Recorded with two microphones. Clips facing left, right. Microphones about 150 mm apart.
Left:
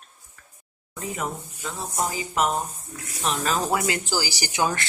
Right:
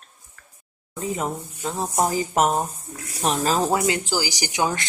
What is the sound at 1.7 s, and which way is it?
Speech, 45° right (ahead or behind).